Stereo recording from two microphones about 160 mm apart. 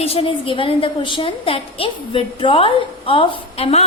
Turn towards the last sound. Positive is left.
turn(degrees=40)  # may be behind; listen again after turning